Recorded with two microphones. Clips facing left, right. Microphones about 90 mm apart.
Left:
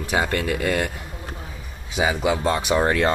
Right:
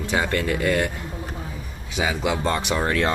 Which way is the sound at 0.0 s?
15° left (ahead or behind).